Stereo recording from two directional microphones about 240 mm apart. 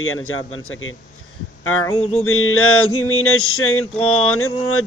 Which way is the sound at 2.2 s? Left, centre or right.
Left.